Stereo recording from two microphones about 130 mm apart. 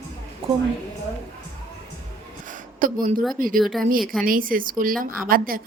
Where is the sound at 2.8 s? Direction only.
90° right.